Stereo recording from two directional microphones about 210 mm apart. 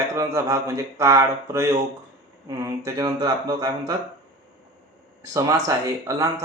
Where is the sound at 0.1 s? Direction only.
15° right (ahead or behind).